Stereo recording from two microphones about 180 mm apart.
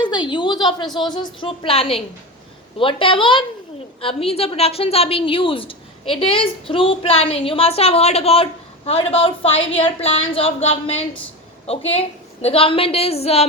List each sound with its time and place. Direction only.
0.0 s a woman's voice: 25° left (ahead or behind)